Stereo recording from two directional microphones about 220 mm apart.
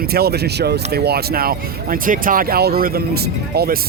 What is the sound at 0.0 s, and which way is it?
Speech, 45° right (ahead or behind).